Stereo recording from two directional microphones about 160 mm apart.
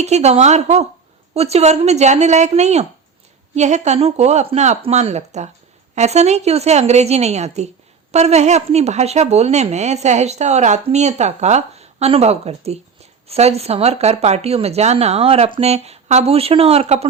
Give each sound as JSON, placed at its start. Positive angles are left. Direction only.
{"t": 0.0, "sound": "speech", "side_deg": -45}